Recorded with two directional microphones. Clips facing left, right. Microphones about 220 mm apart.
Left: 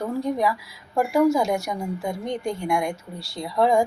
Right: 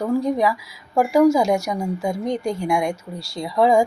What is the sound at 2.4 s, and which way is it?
Speech, 40° right (ahead or behind).